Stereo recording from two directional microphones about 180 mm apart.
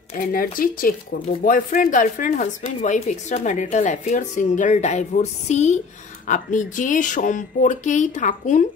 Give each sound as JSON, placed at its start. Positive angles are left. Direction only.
{"t": 0.1, "sound": "a woman's voice", "side_deg": 50}